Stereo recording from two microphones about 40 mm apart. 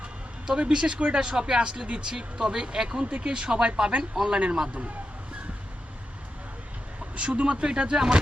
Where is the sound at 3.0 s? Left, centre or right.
Right.